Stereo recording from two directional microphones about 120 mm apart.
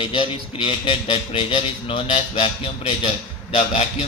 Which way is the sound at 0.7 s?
45° left (ahead or behind).